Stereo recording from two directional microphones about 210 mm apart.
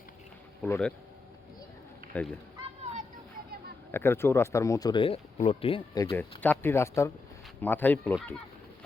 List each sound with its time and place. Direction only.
0.6 s speech: 5° left (ahead or behind)
2.1 s speech: 5° left (ahead or behind)
3.9 s speech: 10° left (ahead or behind)
6.4 s speech: 10° left (ahead or behind)